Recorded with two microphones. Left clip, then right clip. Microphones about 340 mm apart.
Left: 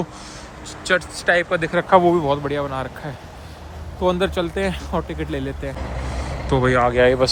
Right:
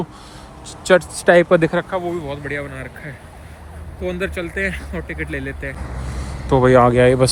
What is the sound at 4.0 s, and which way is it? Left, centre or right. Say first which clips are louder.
Speech: left 4 dB; centre.